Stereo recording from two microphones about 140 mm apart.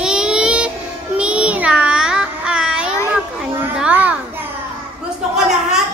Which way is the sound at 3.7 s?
10° right (ahead or behind).